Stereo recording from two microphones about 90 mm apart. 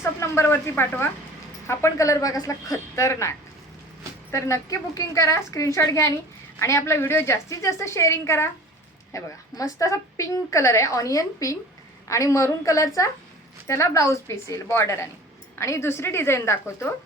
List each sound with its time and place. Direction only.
0.0 s a woman's voice: 30° left (ahead or behind)